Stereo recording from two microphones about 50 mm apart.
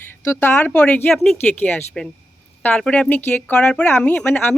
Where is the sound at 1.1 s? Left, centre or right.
Centre.